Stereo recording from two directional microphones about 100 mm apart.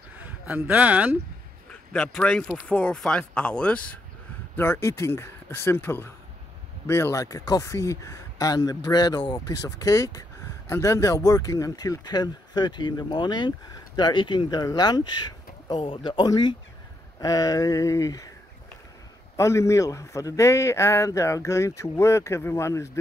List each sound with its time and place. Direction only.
0.6 s speech: 15° right (ahead or behind)
1.7 s a man's voice: 15° left (ahead or behind)
4.6 s a man's voice: 25° left (ahead or behind); by 15.2 s 45° left (ahead or behind)
15.7 s speech: 60° left (ahead or behind); by 18.3 s 35° left (ahead or behind)
19.3 s a man's voice: 30° left (ahead or behind)